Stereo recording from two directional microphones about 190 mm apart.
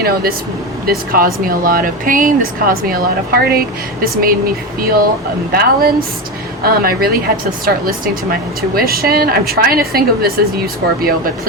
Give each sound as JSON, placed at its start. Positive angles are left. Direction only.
{"t": 0.0, "sound": "speech", "side_deg": -50}